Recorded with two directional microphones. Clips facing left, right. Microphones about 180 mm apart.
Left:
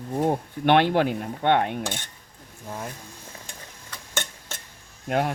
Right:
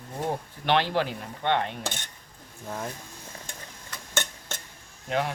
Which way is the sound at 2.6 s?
5° left (ahead or behind).